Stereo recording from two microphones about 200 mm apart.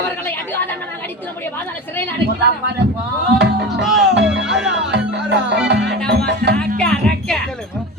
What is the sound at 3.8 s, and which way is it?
Speech, centre (ahead or behind).